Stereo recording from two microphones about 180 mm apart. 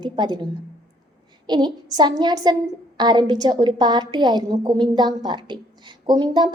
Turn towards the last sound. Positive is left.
turn(degrees=-25)  # may be behind; listen again after turning